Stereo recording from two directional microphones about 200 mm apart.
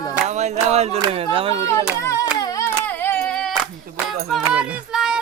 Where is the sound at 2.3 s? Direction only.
15° left (ahead or behind); by 5.2 s 5° right (ahead or behind).